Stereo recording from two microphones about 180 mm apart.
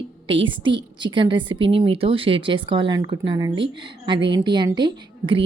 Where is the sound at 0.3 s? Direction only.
30° right (ahead or behind).